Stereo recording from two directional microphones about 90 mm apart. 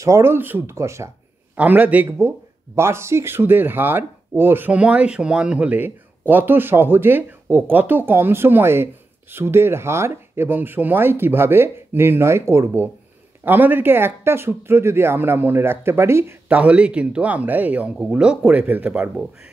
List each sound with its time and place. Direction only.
0.0 s speech: 30° right (ahead or behind)
1.5 s speech: 20° right (ahead or behind)
2.0 s speech: 30° right (ahead or behind)
16.4 s speech: 15° right (ahead or behind)